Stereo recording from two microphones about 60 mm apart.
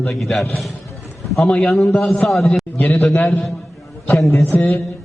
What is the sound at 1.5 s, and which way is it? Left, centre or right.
Speech, centre.